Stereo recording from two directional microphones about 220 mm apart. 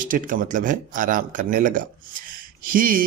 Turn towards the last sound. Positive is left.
turn(degrees=-40)  # may be behind; listen again after turning